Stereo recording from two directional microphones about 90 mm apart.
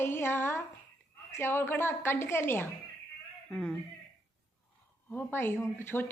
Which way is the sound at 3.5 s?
5° left (ahead or behind).